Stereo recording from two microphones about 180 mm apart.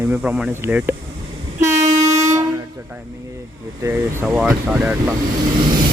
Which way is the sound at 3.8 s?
10° right (ahead or behind).